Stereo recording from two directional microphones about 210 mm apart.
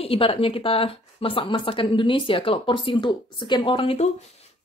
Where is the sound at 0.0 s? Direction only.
25° left (ahead or behind).